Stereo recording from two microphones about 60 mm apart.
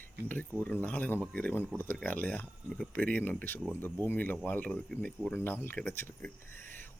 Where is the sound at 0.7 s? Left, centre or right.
Left.